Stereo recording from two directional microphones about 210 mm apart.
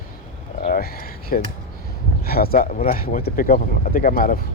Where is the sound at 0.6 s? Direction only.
45° left (ahead or behind).